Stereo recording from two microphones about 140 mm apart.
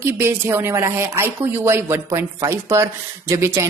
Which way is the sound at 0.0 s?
15° right (ahead or behind).